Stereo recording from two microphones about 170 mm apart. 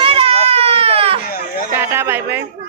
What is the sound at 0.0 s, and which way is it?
Baby cry, 35° right (ahead or behind).